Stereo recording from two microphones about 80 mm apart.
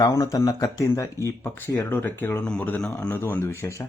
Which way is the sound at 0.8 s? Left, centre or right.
Left.